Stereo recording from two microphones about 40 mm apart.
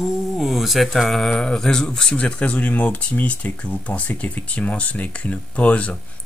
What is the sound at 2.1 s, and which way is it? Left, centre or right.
Speech, left.